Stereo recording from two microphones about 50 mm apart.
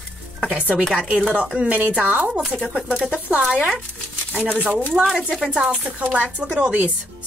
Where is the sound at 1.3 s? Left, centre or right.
Centre.